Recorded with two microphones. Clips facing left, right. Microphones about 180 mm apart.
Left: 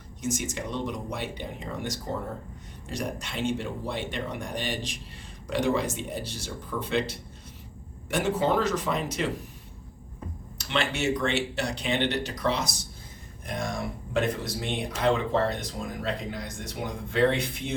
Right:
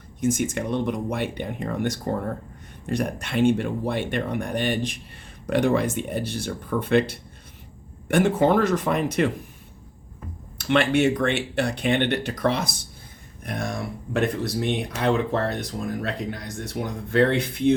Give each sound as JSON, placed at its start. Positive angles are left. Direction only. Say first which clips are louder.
{"t": 0.2, "sound": "speech", "louder": "right 7 dB", "side_deg": -55}
{"t": 10.6, "sound": "speech", "louder": "right 9 dB", "side_deg": -55}